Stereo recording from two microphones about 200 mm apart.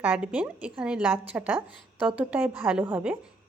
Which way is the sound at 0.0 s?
5° right (ahead or behind).